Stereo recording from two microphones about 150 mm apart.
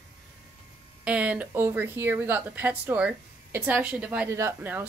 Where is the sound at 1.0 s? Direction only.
10° right (ahead or behind).